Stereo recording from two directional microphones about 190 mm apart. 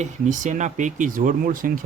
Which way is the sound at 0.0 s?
40° right (ahead or behind).